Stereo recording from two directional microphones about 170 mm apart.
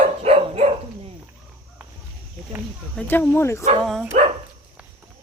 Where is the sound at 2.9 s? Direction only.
10° left (ahead or behind).